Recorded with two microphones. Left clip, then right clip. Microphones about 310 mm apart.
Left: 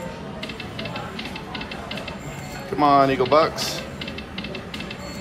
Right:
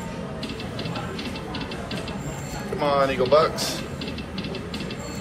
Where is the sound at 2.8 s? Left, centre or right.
Centre.